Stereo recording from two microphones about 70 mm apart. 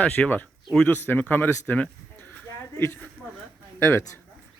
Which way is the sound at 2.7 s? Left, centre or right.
Left.